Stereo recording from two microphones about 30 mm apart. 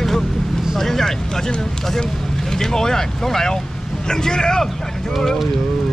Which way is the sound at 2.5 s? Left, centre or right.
Centre.